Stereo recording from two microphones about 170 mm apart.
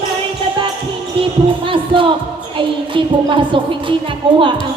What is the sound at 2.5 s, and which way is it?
A woman's voice, 30° right (ahead or behind).